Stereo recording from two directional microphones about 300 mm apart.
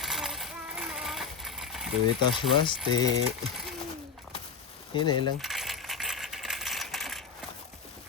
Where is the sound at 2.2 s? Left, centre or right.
Centre.